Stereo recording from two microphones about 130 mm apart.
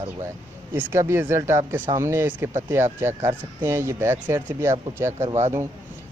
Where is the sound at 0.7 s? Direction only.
20° right (ahead or behind).